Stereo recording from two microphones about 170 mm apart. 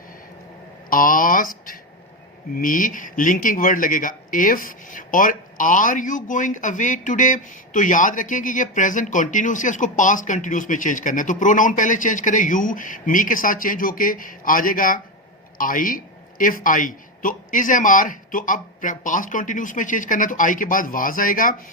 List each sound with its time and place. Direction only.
0.9 s a man's voice: 55° left (ahead or behind)